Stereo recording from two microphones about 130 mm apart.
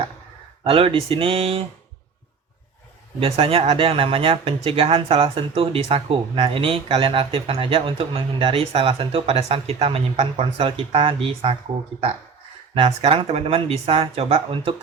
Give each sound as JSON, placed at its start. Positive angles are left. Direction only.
{"t": 0.6, "sound": "speech", "side_deg": -45}
{"t": 3.2, "sound": "speech", "side_deg": -45}
{"t": 12.7, "sound": "speech", "side_deg": -45}